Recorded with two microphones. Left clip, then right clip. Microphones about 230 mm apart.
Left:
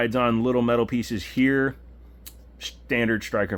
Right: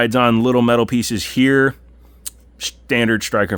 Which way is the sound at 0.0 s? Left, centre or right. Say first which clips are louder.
Right 7 dB; right.